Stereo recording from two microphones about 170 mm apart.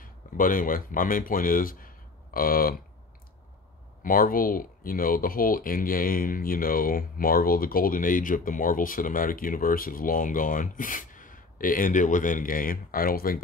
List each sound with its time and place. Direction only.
0.0 s speech: 55° left (ahead or behind)
4.0 s speech: 55° left (ahead or behind)